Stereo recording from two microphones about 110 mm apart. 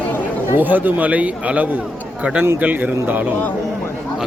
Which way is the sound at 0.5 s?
15° right (ahead or behind).